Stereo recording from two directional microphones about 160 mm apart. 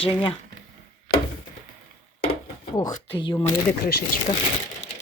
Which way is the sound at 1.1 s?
75° left (ahead or behind).